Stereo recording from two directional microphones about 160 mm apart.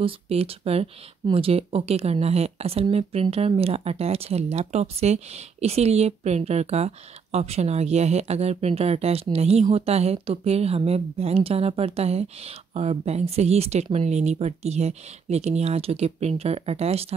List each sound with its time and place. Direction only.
0.0 s speech: 40° right (ahead or behind)